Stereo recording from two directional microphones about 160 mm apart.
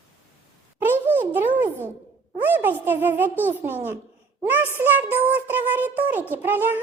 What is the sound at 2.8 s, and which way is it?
A child's voice, 10° right (ahead or behind).